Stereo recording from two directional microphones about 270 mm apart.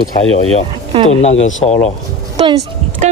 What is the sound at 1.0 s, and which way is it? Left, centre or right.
Speech, left.